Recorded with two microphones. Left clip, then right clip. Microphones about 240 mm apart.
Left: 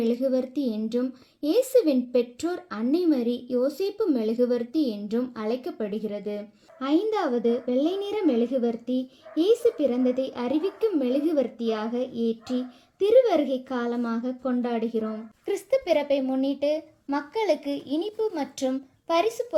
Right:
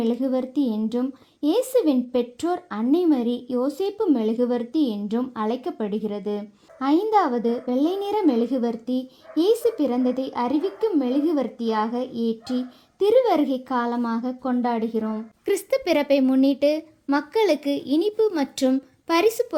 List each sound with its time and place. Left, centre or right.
0.0 s speech: right
15.4 s a woman's voice: right